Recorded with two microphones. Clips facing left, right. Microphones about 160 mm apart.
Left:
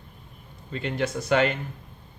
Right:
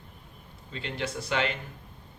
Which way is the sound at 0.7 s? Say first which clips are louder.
Left 6 dB; 50° left (ahead or behind).